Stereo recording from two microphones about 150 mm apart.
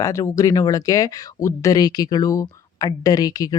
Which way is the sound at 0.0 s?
20° left (ahead or behind).